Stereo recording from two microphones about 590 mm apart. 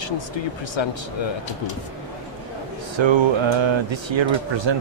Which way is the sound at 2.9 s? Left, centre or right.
Right.